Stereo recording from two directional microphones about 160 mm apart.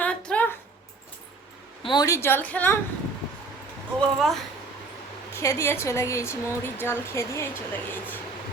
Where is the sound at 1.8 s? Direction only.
25° left (ahead or behind); by 2.7 s 10° left (ahead or behind).